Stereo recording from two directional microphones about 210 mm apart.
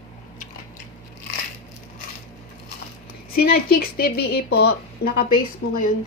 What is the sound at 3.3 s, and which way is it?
A woman's voice, 45° left (ahead or behind).